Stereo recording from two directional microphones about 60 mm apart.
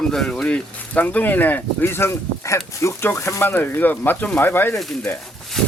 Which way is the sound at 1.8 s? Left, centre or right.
Left.